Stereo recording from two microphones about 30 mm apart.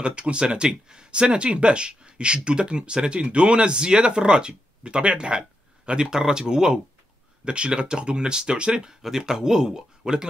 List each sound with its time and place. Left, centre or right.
0.0 s speech: right
5.9 s speech: right
7.4 s speech: right
9.0 s speech: centre